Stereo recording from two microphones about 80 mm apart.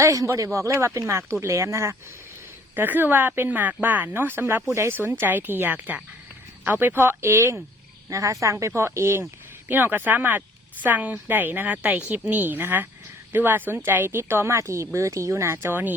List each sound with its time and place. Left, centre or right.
0.0 s speech: right
2.7 s a woman's voice: right
5.2 s a woman's voice: right
9.6 s a woman's voice: right